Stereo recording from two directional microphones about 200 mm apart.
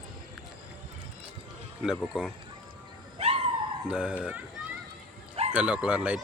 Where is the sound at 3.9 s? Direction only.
5° right (ahead or behind).